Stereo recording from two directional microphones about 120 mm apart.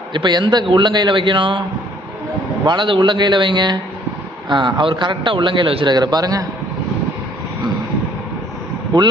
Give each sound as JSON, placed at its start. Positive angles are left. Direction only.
{"t": 0.1, "sound": "a man's voice", "side_deg": -40}
{"t": 2.6, "sound": "a man's voice", "side_deg": -40}